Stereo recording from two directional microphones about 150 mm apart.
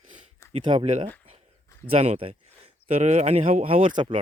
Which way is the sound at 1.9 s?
45° right (ahead or behind).